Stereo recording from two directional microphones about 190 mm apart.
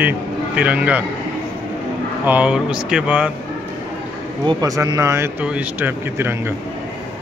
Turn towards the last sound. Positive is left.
turn(degrees=-10)  # may be behind; listen again after turning